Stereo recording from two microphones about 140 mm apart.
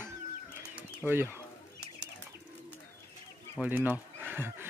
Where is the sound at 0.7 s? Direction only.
15° right (ahead or behind).